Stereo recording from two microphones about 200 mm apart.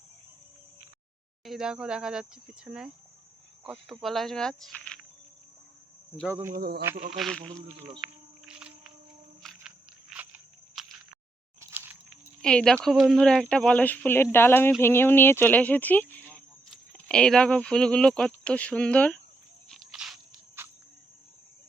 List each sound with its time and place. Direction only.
1.5 s speech: 5° right (ahead or behind)
6.2 s speech: 10° right (ahead or behind)
6.5 s speech: 50° right (ahead or behind)
7.1 s speech: centre (ahead or behind)
8.0 s music: 5° right (ahead or behind)
9.4 s a sound: centre (ahead or behind)
12.4 s speech: 5° left (ahead or behind)
19.7 s a sound: centre (ahead or behind)
20.6 s cricket: 10° right (ahead or behind)